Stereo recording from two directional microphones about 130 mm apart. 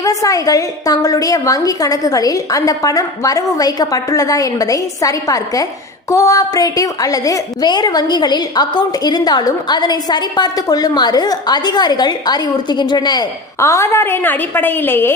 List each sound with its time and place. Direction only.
0.0 s a woman's voice: 25° left (ahead or behind)
13.6 s a woman's voice: 20° left (ahead or behind)